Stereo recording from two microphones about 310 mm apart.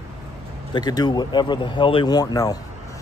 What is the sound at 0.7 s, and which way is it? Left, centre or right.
Speech, centre.